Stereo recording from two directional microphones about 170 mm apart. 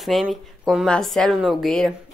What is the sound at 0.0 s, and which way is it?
Speech, centre (ahead or behind).